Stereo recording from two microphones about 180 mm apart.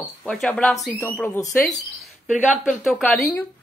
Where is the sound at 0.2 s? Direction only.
5° left (ahead or behind).